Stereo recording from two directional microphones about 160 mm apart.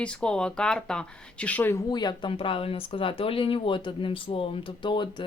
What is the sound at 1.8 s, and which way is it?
Speech, 25° left (ahead or behind).